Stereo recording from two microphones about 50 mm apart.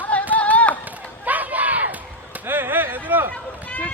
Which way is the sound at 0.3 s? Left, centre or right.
Left.